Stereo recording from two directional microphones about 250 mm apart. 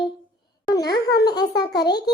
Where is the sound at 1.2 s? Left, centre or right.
Centre.